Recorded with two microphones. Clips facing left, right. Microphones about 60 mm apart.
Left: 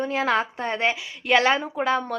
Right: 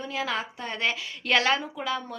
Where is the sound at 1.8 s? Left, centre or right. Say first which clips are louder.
Left 7 dB; left.